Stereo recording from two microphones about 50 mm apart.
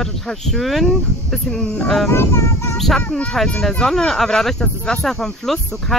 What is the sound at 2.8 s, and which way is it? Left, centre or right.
Speech, centre.